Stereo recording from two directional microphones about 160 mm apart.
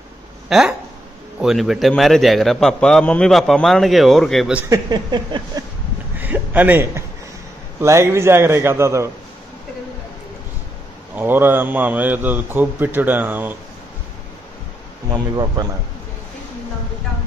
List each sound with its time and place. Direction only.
0.5 s a man's voice: 5° right (ahead or behind)
4.6 s speech: 25° right (ahead or behind)
6.1 s a sound: 10° right (ahead or behind)
7.8 s a man's voice: 15° right (ahead or behind)
11.1 s a man's voice: 15° right (ahead or behind)
15.0 s speech: 25° right (ahead or behind)